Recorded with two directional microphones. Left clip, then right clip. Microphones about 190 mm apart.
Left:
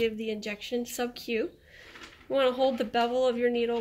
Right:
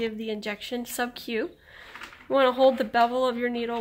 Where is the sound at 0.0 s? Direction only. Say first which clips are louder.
Even; 35° right (ahead or behind).